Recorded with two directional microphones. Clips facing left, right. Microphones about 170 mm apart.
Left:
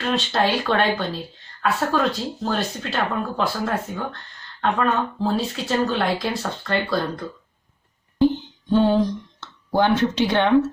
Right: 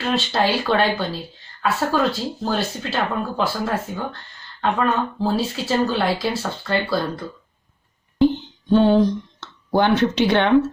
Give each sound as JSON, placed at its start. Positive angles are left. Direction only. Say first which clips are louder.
{"t": 0.0, "sound": "speech", "louder": "right 1 dB", "side_deg": -5}
{"t": 9.4, "sound": "speech", "louder": "right 1 dB", "side_deg": -70}